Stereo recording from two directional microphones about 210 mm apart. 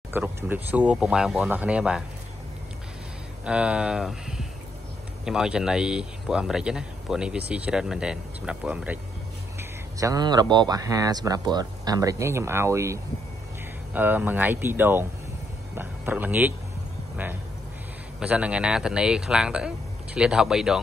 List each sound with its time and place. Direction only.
0.1 s speech: 10° right (ahead or behind)
3.4 s speech: 5° right (ahead or behind)
18.2 s speech: 5° right (ahead or behind)